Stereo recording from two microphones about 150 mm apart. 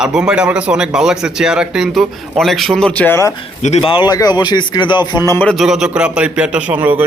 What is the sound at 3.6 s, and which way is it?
A man's voice, 45° left (ahead or behind).